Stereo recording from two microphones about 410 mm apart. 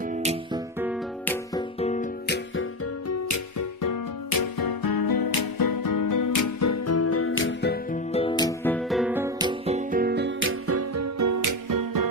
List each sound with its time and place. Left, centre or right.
0.1 s music: centre
0.8 s music: centre
1.8 s music: centre
3.1 s music: left; by 12.0 s right